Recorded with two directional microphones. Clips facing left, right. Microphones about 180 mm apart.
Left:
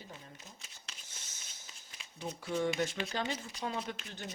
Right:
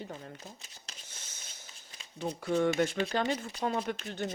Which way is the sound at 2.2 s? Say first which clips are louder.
Right 5 dB; 60° right (ahead or behind).